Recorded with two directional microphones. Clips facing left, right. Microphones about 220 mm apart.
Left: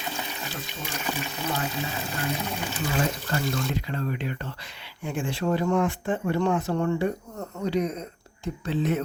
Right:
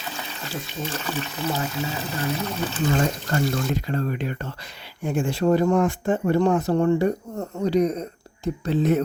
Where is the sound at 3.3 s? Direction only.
40° right (ahead or behind).